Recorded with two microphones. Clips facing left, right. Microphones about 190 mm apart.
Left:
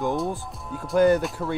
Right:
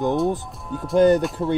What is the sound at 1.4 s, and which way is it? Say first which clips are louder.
Speech: right 6 dB; 20° right (ahead or behind).